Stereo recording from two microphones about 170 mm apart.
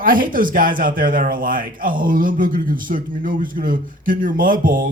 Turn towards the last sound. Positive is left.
turn(degrees=-55)  # may be behind; listen again after turning